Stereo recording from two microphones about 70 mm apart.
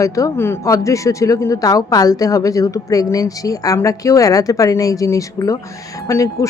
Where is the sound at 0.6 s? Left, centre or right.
Left.